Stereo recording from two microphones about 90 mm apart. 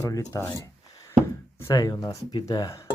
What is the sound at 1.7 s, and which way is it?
Speech, 45° left (ahead or behind).